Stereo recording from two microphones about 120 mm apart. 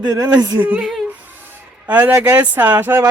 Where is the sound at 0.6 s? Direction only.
10° right (ahead or behind).